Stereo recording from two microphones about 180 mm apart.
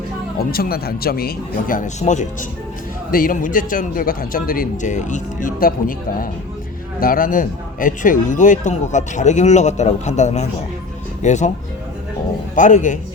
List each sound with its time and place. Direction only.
0.3 s a man's voice: 55° left (ahead or behind)
7.0 s a man's voice: 50° left (ahead or behind)
12.5 s a man's voice: 45° left (ahead or behind)